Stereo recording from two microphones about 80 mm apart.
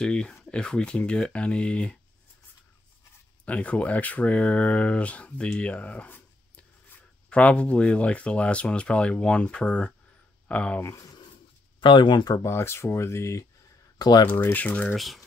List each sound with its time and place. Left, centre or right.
0.0 s speech: centre
3.4 s speech: centre
10.8 s speech: left
11.8 s speech: left
12.4 s speech: left
13.9 s speech: left
14.2 s speech: left
15.0 s speech: centre